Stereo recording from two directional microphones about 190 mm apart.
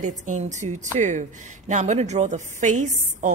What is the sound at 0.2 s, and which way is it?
A woman's voice, 40° right (ahead or behind).